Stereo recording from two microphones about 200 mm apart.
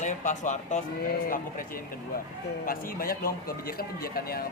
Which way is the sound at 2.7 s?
45° left (ahead or behind).